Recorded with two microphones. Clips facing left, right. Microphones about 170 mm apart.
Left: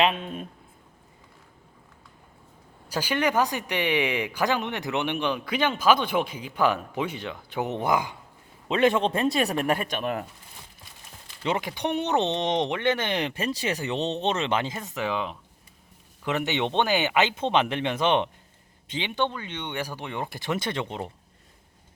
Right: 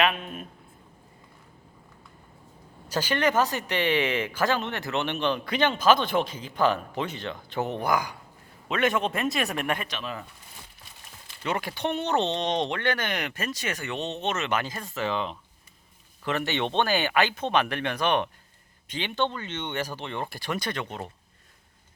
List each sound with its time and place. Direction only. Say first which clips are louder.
0.0 s speech: left 2 dB; 25° left (ahead or behind)
2.9 s a man's voice: even; 10° left (ahead or behind); by 10.2 s 55° left (ahead or behind)
11.4 s speech: left 2 dB; 20° left (ahead or behind)